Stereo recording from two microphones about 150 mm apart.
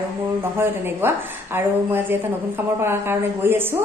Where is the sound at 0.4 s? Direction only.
15° right (ahead or behind).